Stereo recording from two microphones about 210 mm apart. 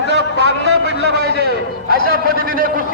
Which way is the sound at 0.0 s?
55° left (ahead or behind).